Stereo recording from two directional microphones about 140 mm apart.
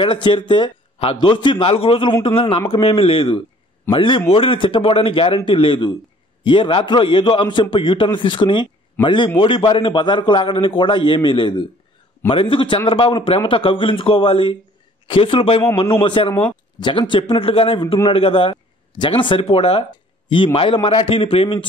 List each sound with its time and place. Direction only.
0.0 s speech: 35° left (ahead or behind)